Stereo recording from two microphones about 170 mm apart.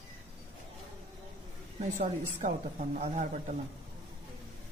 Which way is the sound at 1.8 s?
45° right (ahead or behind).